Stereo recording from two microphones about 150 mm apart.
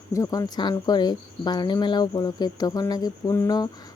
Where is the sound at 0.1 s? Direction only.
20° left (ahead or behind).